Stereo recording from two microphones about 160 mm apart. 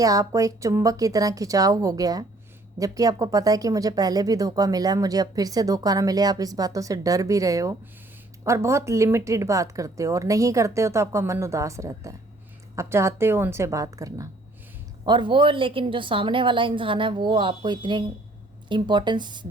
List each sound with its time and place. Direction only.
0.0 s a woman's voice: 20° right (ahead or behind)